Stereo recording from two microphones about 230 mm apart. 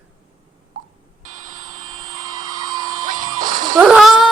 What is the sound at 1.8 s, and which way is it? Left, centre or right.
Helicopter, centre.